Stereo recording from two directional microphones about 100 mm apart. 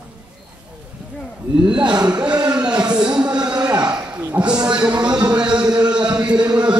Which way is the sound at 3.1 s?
10° right (ahead or behind).